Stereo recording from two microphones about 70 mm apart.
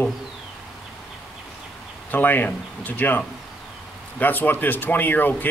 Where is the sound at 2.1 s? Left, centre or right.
Left.